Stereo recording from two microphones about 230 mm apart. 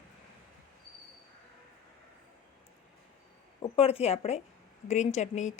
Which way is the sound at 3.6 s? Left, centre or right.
Left.